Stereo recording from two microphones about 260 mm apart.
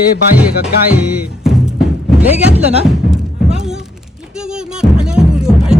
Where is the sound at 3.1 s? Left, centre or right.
Centre.